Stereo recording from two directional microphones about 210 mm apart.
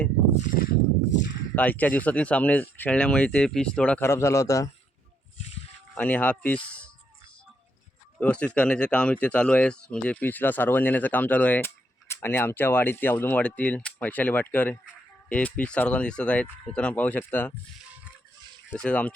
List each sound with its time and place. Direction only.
0.4 s a sound: 40° left (ahead or behind)
1.5 s speech: 5° left (ahead or behind)
5.9 s speech: 10° left (ahead or behind)
6.7 s a sound: 5° left (ahead or behind)
8.2 s speech: 5° left (ahead or behind)
18.7 s speech: 5° left (ahead or behind)